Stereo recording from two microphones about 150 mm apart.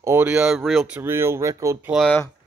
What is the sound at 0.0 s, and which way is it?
Speech, 15° right (ahead or behind).